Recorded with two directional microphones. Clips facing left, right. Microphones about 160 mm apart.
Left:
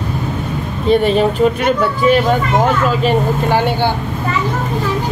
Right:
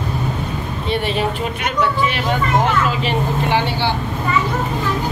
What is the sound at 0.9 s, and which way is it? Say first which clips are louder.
Speech: left 8 dB; 40° left (ahead or behind).